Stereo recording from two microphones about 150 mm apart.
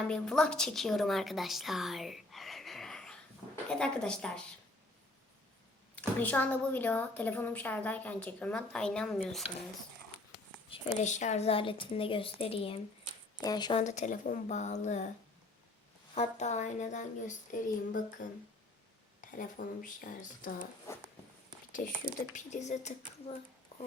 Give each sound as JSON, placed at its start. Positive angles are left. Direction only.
{"t": 0.1, "sound": "a woman's voice", "side_deg": 5}
{"t": 6.0, "sound": "a woman's voice", "side_deg": 10}
{"t": 10.7, "sound": "a woman's voice", "side_deg": 35}
{"t": 11.0, "sound": "a woman's voice", "side_deg": 55}
{"t": 13.4, "sound": "speech", "side_deg": 25}
{"t": 13.7, "sound": "speech", "side_deg": 50}
{"t": 16.1, "sound": "speech", "side_deg": 50}
{"t": 20.9, "sound": "a woman's voice", "side_deg": 20}
{"t": 21.8, "sound": "speech", "side_deg": 65}
{"t": 22.4, "sound": "speech", "side_deg": 50}